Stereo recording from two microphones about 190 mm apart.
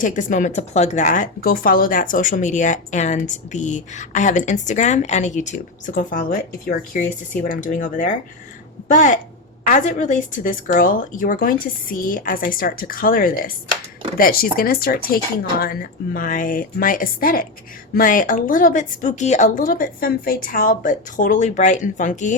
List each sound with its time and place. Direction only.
0.0 s a woman's voice: 45° left (ahead or behind)